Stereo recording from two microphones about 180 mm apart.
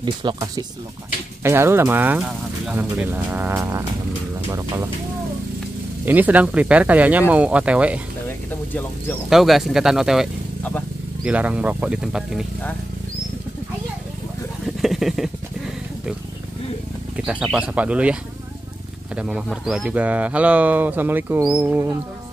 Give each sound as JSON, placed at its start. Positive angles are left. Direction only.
{"t": 0.0, "sound": "speech", "side_deg": -25}
{"t": 1.4, "sound": "speech", "side_deg": -15}
{"t": 6.0, "sound": "speech", "side_deg": -10}
{"t": 8.3, "sound": "vehicle", "side_deg": 10}
{"t": 9.3, "sound": "speech", "side_deg": 0}
{"t": 11.2, "sound": "speech", "side_deg": -5}
{"t": 14.8, "sound": "a sound", "side_deg": 0}
{"t": 17.2, "sound": "speech", "side_deg": -5}
{"t": 19.1, "sound": "speech", "side_deg": -5}